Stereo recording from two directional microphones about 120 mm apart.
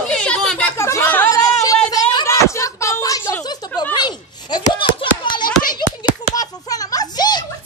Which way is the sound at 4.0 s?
35° left (ahead or behind).